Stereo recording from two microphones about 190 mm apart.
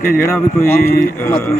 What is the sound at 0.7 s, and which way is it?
Speech, 55° left (ahead or behind).